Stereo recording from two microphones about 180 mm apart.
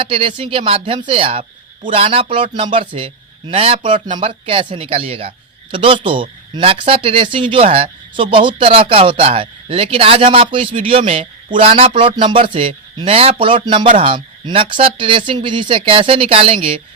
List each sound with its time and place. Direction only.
0.0 s speech: 30° right (ahead or behind)